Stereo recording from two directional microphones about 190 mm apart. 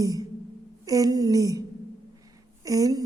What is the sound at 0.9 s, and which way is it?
Speech, 20° right (ahead or behind).